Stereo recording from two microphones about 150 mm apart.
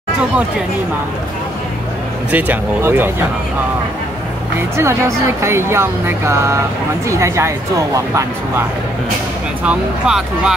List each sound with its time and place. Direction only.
2.3 s speech: 10° right (ahead or behind)
4.6 s speech: 20° right (ahead or behind)
9.6 s speech: 5° right (ahead or behind)